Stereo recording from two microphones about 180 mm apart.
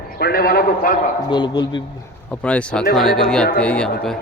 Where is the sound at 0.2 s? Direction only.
60° left (ahead or behind).